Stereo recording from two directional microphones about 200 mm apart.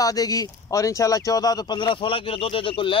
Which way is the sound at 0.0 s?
20° left (ahead or behind).